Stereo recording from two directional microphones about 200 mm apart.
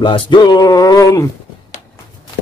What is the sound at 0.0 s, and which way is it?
Speech, 25° left (ahead or behind).